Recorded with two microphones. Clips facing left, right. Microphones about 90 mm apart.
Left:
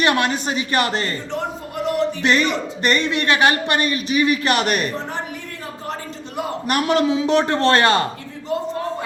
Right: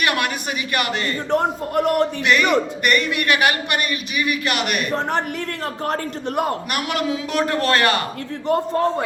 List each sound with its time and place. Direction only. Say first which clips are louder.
0.0 s a man's voice: left 3 dB; 30° left (ahead or behind)
1.3 s a man's voice: right 6 dB; 55° right (ahead or behind)
2.2 s a man's voice: right 1 dB; 30° left (ahead or behind)
5.8 s a man's voice: right 7 dB; 55° right (ahead or behind)
6.7 s a man's voice: left 5 dB; 30° left (ahead or behind)